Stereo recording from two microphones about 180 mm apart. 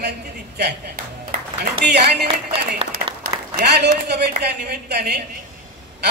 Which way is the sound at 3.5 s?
70° right (ahead or behind).